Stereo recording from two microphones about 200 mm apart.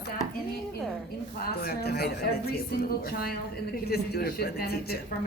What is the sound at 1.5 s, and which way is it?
Speech, 50° left (ahead or behind).